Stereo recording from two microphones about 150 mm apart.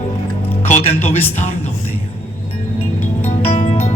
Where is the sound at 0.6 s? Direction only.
45° left (ahead or behind).